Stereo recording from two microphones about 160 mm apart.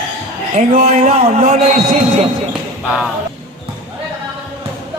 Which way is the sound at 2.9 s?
Centre (ahead or behind).